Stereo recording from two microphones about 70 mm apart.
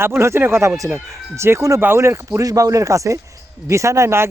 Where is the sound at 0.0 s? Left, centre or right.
Right.